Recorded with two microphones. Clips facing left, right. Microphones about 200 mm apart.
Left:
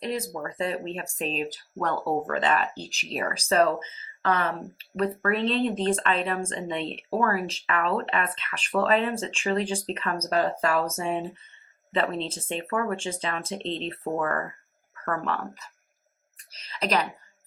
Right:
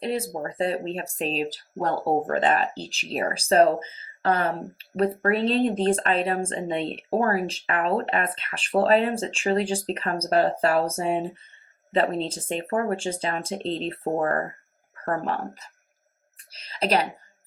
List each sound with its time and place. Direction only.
0.0 s a woman's voice: 35° right (ahead or behind)